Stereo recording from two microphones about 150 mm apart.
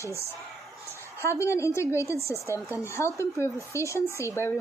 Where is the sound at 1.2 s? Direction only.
20° left (ahead or behind).